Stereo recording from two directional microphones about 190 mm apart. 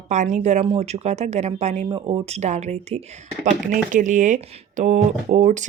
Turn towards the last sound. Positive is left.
turn(degrees=-40)  # may be behind; listen again after turning